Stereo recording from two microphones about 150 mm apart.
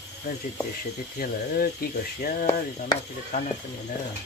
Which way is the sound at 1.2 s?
80° left.